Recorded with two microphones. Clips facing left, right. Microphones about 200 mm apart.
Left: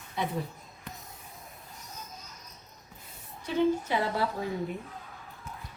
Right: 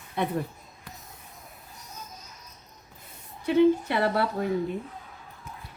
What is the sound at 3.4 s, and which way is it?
Speech, 65° right (ahead or behind).